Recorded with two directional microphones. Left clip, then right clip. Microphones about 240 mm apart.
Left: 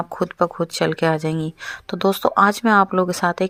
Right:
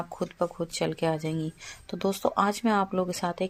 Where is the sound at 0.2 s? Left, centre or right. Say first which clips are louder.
Left 10 dB; left.